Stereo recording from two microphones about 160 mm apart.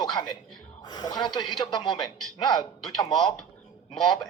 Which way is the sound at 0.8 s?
25° left (ahead or behind).